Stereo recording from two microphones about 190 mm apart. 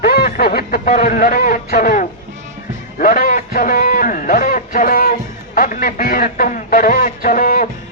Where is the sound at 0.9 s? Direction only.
45° left (ahead or behind).